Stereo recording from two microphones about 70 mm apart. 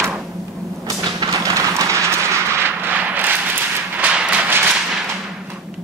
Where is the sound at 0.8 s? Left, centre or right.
Right; by 4.5 s centre.